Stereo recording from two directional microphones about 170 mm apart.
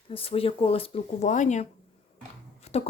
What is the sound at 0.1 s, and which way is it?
Speech, 35° left (ahead or behind).